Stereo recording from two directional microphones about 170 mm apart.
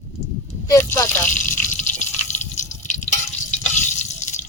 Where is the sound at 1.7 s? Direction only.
45° left (ahead or behind).